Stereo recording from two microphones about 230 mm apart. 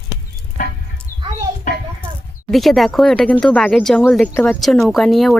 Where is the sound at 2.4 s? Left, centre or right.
Centre.